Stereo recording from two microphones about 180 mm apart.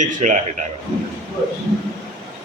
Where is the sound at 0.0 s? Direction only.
45° right (ahead or behind).